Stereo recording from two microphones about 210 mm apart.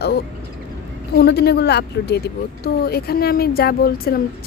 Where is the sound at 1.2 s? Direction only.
50° left (ahead or behind).